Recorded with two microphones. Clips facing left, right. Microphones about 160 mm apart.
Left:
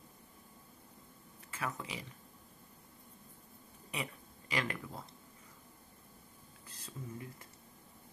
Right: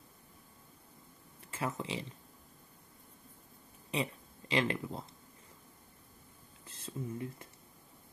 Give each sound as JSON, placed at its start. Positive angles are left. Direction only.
{"t": 1.5, "sound": "speech", "side_deg": -25}
{"t": 3.9, "sound": "speech", "side_deg": -25}
{"t": 6.7, "sound": "speech", "side_deg": -25}